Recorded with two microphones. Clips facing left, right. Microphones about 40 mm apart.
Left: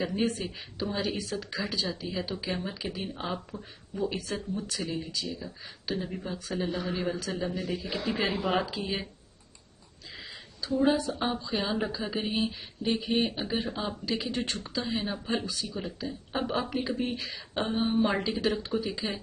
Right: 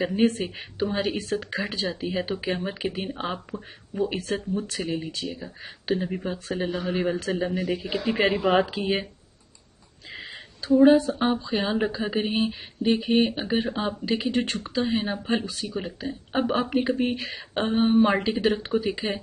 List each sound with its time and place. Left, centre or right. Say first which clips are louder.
0.2 s speech: right 7 dB; right
10.1 s a sound: right 6 dB; right
11.4 s speech: right 5 dB; right